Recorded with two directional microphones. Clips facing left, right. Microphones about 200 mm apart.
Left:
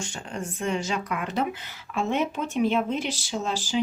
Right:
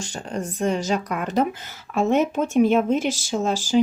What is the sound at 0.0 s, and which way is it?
Speech, 40° right (ahead or behind).